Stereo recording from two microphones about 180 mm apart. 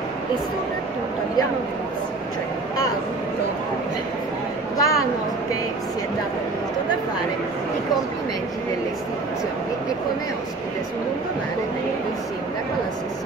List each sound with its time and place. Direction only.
4.7 s a woman's voice: 20° left (ahead or behind)